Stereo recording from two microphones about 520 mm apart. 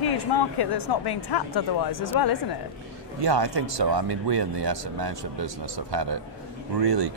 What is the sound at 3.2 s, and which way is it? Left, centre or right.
Speech, right.